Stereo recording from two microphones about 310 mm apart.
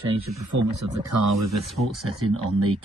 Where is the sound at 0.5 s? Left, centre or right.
Right.